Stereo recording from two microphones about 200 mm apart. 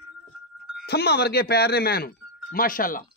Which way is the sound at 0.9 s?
50° left (ahead or behind).